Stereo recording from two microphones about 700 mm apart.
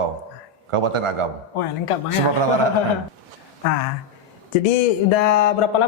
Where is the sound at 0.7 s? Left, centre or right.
Right.